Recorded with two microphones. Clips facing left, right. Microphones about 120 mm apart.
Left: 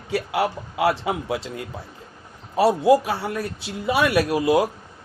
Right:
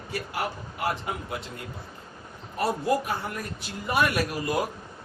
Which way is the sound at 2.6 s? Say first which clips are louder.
Left 9 dB; 90° left.